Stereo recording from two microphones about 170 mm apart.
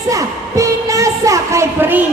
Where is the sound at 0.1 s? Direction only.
20° right (ahead or behind).